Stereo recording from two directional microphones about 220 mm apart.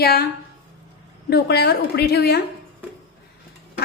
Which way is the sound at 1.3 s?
45° left (ahead or behind).